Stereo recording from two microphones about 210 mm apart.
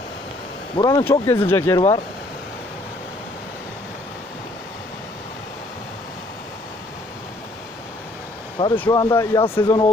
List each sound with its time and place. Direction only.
0.8 s speech: 20° left (ahead or behind)
8.5 s speech: 25° left (ahead or behind)